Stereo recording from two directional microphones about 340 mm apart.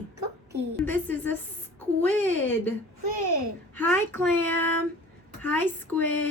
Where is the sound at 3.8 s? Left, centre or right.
Centre.